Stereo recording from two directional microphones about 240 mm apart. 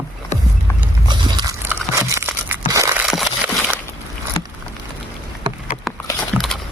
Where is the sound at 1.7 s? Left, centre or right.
Centre.